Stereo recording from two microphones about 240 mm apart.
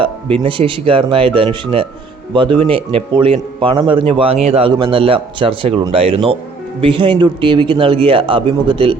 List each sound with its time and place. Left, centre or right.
0.4 s a man's voice: right